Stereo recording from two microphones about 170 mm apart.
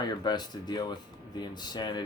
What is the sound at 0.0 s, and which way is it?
Speech, 25° left (ahead or behind).